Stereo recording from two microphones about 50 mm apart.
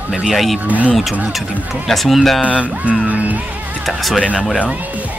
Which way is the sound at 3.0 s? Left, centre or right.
Right.